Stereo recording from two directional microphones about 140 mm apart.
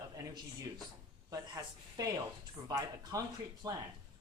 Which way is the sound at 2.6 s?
25° right (ahead or behind).